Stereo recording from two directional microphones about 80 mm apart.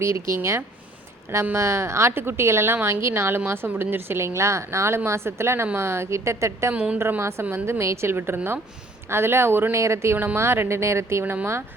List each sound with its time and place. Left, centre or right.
0.0 s speech: right
6.7 s a woman's voice: centre
7.2 s speech: right